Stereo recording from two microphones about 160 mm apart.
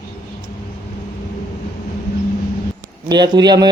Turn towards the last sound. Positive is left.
turn(degrees=-25)  # may be behind; listen again after turning